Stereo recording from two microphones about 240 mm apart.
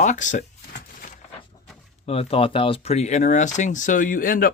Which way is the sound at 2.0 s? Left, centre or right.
Left.